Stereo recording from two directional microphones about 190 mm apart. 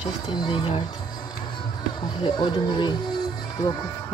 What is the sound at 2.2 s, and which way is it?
Speech, 25° left (ahead or behind).